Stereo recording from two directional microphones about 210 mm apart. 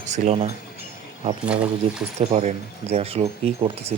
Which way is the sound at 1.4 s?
5° right (ahead or behind).